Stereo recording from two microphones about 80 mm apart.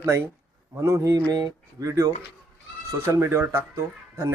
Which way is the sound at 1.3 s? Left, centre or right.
Right.